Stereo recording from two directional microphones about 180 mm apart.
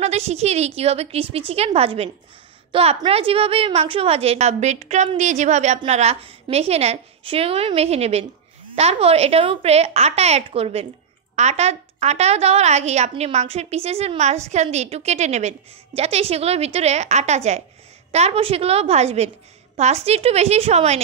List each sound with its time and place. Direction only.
0.0 s a woman's voice: 35° right (ahead or behind)